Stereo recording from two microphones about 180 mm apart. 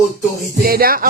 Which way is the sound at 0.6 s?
55° right (ahead or behind).